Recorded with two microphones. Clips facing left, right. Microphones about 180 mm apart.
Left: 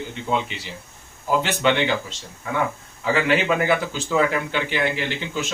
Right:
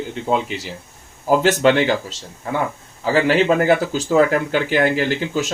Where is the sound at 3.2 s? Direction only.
40° right (ahead or behind).